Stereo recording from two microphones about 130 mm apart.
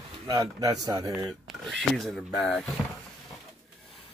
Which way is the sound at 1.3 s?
Centre (ahead or behind).